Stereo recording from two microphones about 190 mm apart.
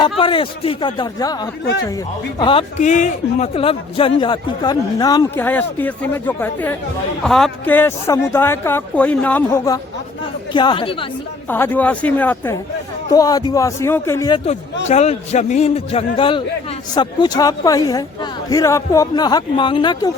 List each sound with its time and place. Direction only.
0.0 s a man's voice: 25° left (ahead or behind)
2.4 s a man's voice: 30° left (ahead or behind)
11.4 s speech: 10° left (ahead or behind)
14.8 s a man's voice: 35° left (ahead or behind)